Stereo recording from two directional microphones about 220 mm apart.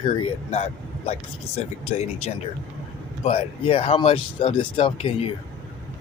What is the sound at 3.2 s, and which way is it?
Speech, 25° left (ahead or behind).